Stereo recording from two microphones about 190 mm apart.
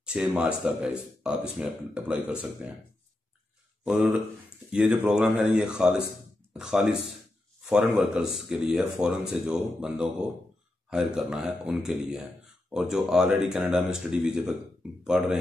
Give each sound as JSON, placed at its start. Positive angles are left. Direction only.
{"t": 0.0, "sound": "speech", "side_deg": -5}
{"t": 3.8, "sound": "speech", "side_deg": -5}